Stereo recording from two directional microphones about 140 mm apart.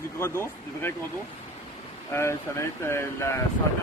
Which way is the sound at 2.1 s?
20° left (ahead or behind).